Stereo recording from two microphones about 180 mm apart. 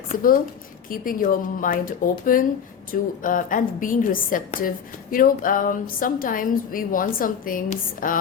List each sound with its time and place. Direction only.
0.1 s a woman's voice: 50° left (ahead or behind)